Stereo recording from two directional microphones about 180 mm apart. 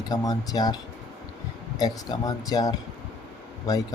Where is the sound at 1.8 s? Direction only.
20° left (ahead or behind).